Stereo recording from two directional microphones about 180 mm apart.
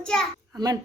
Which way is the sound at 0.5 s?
20° right (ahead or behind).